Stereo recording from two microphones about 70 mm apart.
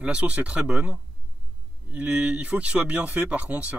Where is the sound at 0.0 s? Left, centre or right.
Centre.